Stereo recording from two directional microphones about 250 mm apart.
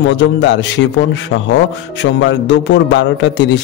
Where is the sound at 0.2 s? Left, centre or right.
Left.